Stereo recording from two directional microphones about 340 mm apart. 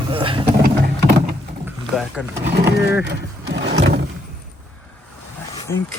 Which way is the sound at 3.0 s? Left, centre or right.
Right.